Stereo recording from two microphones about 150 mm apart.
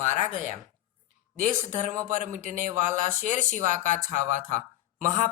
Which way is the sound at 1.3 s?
60° right (ahead or behind).